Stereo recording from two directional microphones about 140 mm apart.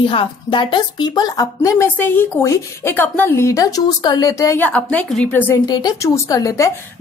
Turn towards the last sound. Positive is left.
turn(degrees=25)  # may be behind; listen again after turning